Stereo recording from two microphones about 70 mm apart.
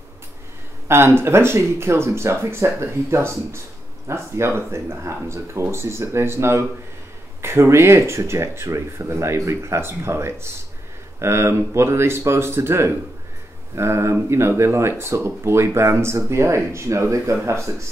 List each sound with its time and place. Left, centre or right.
0.8 s speech: right